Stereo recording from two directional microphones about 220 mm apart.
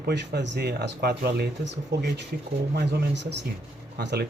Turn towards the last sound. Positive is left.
turn(degrees=-45)  # may be behind; listen again after turning